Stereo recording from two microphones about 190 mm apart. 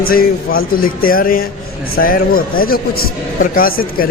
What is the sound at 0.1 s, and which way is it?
A man's voice, 50° left (ahead or behind).